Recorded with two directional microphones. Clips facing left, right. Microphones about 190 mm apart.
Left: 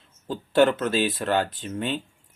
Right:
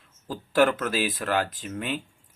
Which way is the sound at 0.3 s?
25° left (ahead or behind).